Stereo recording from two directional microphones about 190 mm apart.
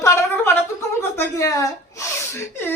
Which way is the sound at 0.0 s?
15° left (ahead or behind).